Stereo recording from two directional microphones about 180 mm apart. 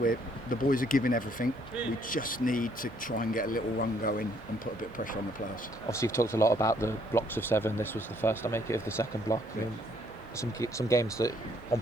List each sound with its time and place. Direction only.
0.0 s speech: 50° left (ahead or behind)
5.9 s speech: 15° left (ahead or behind)